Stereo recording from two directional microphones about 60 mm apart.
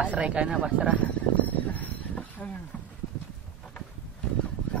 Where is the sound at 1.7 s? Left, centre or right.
Left.